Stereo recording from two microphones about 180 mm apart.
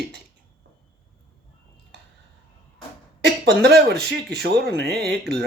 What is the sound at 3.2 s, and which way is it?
Speech, 70° right (ahead or behind).